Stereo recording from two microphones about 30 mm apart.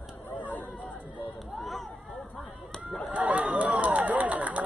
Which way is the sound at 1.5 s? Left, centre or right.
Centre.